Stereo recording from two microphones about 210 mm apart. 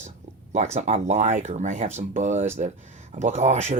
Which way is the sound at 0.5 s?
35° right (ahead or behind).